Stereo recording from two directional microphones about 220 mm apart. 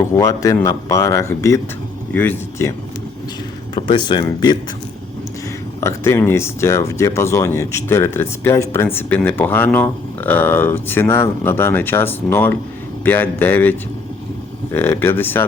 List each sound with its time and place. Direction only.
0.1 s speech: 15° left (ahead or behind)
3.8 s speech: 20° left (ahead or behind)
5.8 s speech: 10° left (ahead or behind)